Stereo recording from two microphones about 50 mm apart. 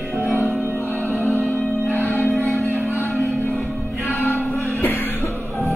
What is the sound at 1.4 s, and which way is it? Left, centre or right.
Music, centre.